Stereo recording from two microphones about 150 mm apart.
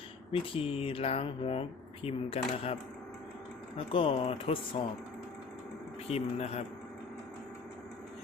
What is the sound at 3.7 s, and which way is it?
Speech, 35° left (ahead or behind).